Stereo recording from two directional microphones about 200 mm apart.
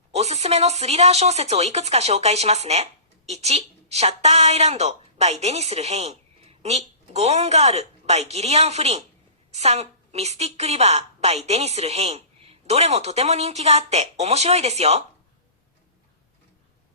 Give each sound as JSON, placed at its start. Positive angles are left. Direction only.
{"t": 0.1, "sound": "speech", "side_deg": -30}